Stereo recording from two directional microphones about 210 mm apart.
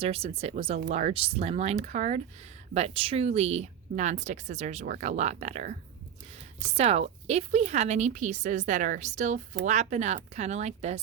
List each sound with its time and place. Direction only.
0.0 s speech: 30° right (ahead or behind)